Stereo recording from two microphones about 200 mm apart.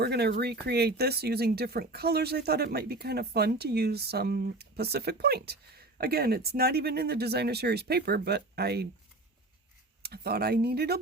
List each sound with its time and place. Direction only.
0.0 s speech: 55° right (ahead or behind)
10.0 s speech: 50° right (ahead or behind)